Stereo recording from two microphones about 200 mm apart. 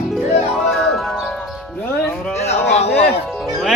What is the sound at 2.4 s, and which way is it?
Speech, 35° left (ahead or behind).